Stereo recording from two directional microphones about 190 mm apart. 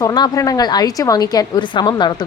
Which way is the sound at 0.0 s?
20° left (ahead or behind).